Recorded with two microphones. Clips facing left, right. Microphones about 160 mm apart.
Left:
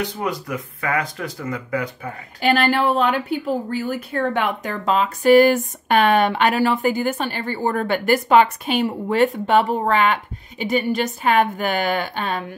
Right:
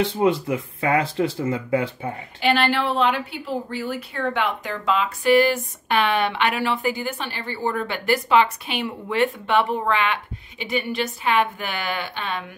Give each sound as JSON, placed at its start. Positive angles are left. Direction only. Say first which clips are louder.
{"t": 0.0, "sound": "speech", "louder": "right 5 dB", "side_deg": -25}
{"t": 2.4, "sound": "a woman's voice", "louder": "left 3 dB", "side_deg": 45}